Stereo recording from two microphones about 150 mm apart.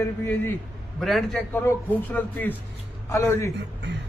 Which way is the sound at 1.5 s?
10° left (ahead or behind).